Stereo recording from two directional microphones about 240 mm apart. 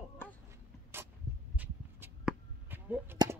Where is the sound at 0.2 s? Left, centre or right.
Centre.